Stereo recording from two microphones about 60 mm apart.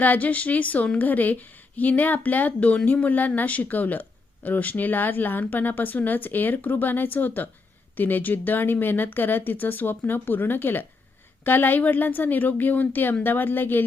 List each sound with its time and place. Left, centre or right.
0.0 s speech: left